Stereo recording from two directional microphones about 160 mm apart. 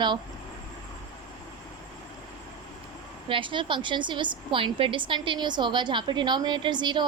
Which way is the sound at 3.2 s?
30° right (ahead or behind).